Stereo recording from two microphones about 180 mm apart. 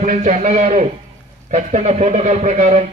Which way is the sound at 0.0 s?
40° right (ahead or behind).